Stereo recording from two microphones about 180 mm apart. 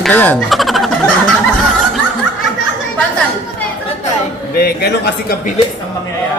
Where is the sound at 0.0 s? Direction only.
10° left (ahead or behind).